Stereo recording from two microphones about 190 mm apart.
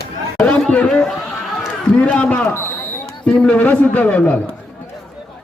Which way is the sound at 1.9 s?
5° left (ahead or behind).